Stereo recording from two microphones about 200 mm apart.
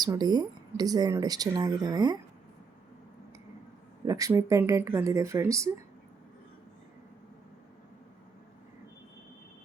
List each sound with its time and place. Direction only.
0.0 s speech: 20° right (ahead or behind)
4.0 s speech: 15° right (ahead or behind)